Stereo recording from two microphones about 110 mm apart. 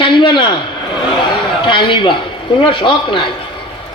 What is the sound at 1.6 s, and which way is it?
A man's voice, 50° left (ahead or behind).